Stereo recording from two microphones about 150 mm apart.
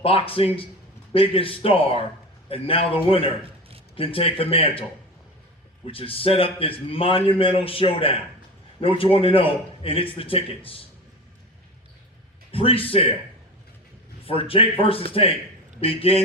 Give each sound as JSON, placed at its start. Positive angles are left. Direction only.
{"t": 0.0, "sound": "a man's voice", "side_deg": 40}
{"t": 12.5, "sound": "a man's voice", "side_deg": 40}
{"t": 14.3, "sound": "a man's voice", "side_deg": 40}